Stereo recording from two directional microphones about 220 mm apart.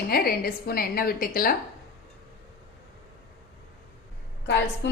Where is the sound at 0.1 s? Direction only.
45° left (ahead or behind).